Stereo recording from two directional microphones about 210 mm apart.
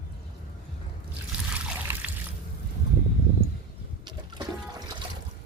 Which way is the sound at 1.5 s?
5° right (ahead or behind).